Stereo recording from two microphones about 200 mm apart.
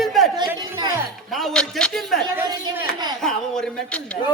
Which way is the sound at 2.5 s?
20° right (ahead or behind).